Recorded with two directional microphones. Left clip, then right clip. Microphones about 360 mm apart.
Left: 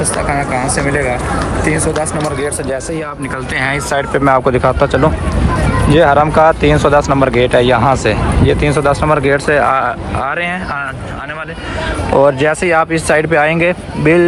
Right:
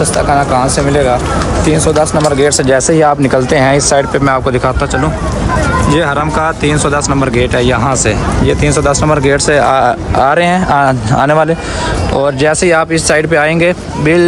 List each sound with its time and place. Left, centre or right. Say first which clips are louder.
2.1 s speech: right 8 dB; centre
3.3 s speech: right 8 dB; centre
12.1 s speech: left 2 dB; centre